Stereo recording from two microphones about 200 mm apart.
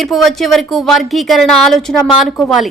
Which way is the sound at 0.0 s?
Centre (ahead or behind).